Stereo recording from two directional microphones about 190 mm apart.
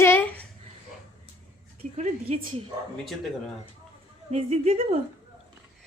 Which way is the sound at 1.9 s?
40° right (ahead or behind).